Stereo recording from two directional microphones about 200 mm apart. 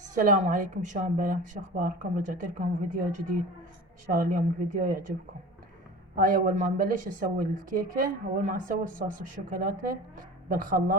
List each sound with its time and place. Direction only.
0.1 s a woman's voice: 40° right (ahead or behind)
6.1 s a woman's voice: 45° right (ahead or behind)